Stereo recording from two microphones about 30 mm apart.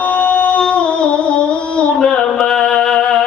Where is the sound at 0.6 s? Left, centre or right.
Left.